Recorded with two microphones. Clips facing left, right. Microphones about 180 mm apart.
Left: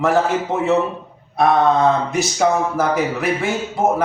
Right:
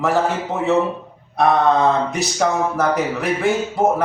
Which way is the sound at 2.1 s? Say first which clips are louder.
Left 2 dB; centre (ahead or behind).